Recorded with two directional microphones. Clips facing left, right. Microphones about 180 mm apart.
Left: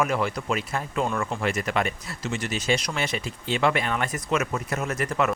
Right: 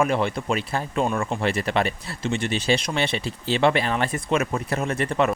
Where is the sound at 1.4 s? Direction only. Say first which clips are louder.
Right 3 dB; 30° right (ahead or behind).